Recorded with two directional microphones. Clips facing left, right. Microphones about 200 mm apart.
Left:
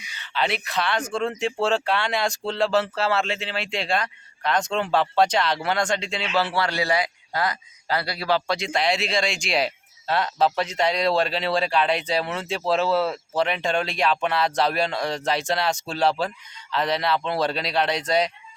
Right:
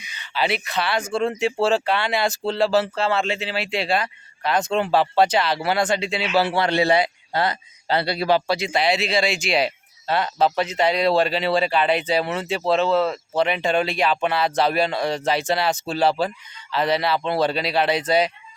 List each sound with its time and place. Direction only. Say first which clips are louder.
0.0 s a sound: right 1 dB; 20° right (ahead or behind)
0.3 s speech: right 2 dB; 5° right (ahead or behind); by 8.4 s 25° right (ahead or behind)
8.4 s speech: right 3 dB; 5° right (ahead or behind)